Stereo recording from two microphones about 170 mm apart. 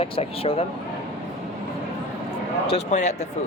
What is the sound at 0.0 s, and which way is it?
Speech, 35° left (ahead or behind).